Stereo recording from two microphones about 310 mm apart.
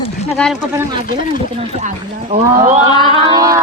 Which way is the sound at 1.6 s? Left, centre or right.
Right.